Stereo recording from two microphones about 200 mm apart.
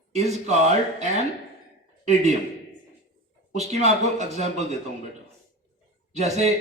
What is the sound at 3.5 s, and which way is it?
A man's voice, 35° right (ahead or behind).